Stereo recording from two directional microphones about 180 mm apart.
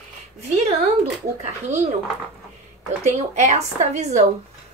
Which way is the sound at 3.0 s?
40° right (ahead or behind).